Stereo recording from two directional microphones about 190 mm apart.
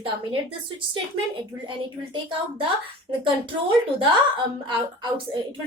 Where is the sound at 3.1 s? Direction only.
25° right (ahead or behind).